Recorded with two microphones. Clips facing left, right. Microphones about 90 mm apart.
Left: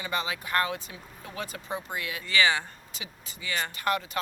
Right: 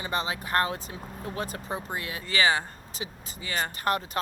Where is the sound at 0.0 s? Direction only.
35° right (ahead or behind).